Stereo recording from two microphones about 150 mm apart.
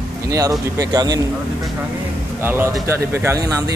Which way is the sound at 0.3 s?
20° right (ahead or behind).